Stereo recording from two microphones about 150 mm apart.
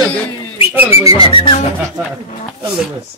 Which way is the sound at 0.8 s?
15° right (ahead or behind).